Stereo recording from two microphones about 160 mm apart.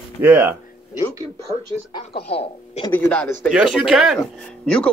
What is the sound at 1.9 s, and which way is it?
Speech, 35° left (ahead or behind).